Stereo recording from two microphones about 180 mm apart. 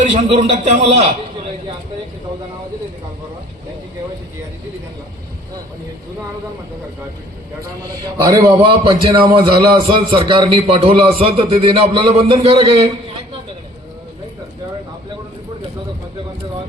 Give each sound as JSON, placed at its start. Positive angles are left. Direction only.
{"t": 0.0, "sound": "a man's voice", "side_deg": -40}
{"t": 8.2, "sound": "a man's voice", "side_deg": -20}